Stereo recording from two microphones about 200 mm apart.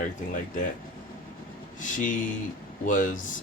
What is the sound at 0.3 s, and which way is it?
Speech, 40° left (ahead or behind).